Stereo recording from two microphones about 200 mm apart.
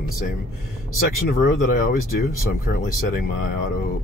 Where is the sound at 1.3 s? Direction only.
45° left (ahead or behind).